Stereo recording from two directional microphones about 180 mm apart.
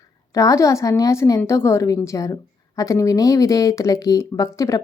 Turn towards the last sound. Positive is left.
turn(degrees=15)  # may be behind; listen again after turning